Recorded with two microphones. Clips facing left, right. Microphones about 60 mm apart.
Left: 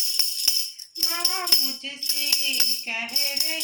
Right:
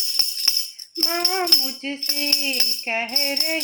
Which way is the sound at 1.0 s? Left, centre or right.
Right.